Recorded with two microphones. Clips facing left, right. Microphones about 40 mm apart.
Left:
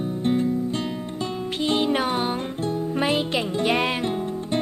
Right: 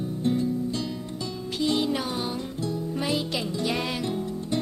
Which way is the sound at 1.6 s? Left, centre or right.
Left.